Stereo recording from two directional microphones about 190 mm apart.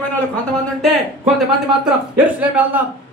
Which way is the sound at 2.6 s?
10° right (ahead or behind).